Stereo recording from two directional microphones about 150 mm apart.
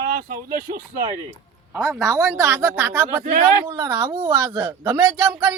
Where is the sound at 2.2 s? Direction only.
10° right (ahead or behind).